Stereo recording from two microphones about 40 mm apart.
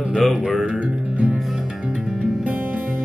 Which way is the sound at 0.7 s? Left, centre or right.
Right.